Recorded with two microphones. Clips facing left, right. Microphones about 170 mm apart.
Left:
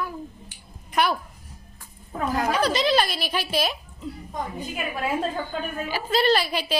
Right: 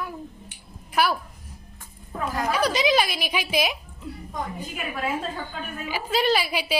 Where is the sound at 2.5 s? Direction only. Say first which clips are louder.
Right 1 dB; 10° right (ahead or behind).